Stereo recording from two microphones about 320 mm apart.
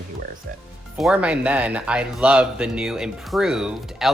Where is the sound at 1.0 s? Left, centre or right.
Centre.